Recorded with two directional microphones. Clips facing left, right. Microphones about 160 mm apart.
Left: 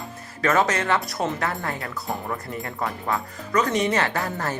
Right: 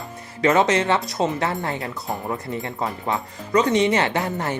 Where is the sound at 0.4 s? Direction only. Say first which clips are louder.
Right 4 dB; 20° right (ahead or behind).